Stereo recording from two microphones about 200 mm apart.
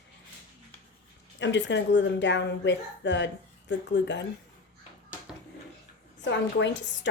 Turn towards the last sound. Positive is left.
turn(degrees=65)  # may be behind; listen again after turning